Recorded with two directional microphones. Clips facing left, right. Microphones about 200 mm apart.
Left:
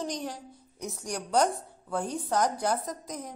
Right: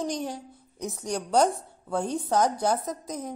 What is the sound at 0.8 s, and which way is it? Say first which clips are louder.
A woman's voice: right 4 dB; 25° right (ahead or behind).